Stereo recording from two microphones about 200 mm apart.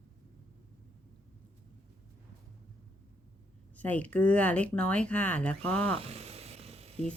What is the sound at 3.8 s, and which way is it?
Speech, 5° left (ahead or behind).